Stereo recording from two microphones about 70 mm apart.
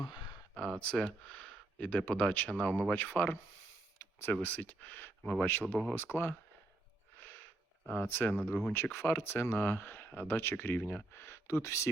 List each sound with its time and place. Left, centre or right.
0.5 s speech: centre
4.4 s speech: left
7.2 s a sound: left
7.9 s speech: left